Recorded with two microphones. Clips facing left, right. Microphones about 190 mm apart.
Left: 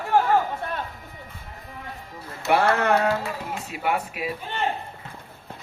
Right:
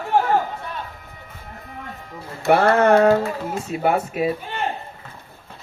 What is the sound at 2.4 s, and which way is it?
Speech, 50° right (ahead or behind).